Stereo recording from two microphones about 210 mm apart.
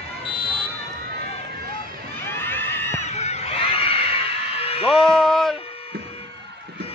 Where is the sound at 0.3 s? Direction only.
25° left (ahead or behind).